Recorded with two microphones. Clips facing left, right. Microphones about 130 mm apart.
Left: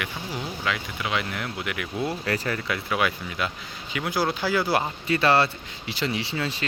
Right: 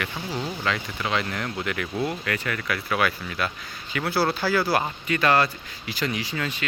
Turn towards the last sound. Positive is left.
turn(degrees=30)  # may be behind; listen again after turning